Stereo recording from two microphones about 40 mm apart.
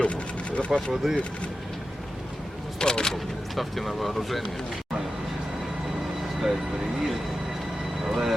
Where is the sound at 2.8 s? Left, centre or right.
Centre.